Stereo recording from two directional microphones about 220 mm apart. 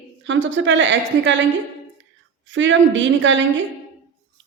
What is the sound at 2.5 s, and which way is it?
Speech, 60° right (ahead or behind).